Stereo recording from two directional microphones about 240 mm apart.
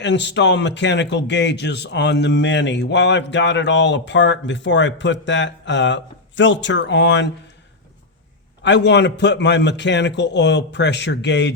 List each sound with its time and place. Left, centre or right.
0.0 s speech: left
8.6 s speech: left